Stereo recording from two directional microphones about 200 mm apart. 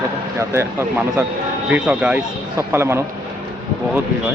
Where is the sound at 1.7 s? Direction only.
5° right (ahead or behind).